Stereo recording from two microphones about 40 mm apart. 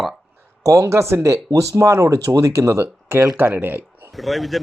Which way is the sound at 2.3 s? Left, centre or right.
Right.